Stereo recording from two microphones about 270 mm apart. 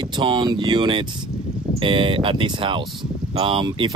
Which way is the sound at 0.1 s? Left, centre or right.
Centre.